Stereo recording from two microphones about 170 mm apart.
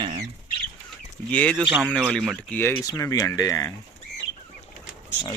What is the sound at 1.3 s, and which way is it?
Speech, 10° left (ahead or behind).